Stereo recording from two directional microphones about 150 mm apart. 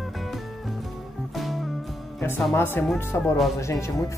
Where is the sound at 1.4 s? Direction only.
Centre (ahead or behind).